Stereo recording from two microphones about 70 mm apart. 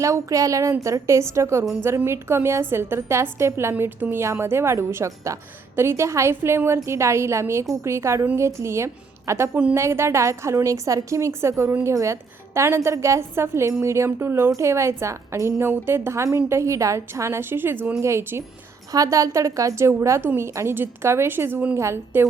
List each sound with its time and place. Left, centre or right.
0.0 s a woman's voice: right
18.9 s a woman's voice: right